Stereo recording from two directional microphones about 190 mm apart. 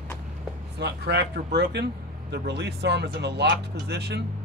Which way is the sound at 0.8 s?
65° right (ahead or behind).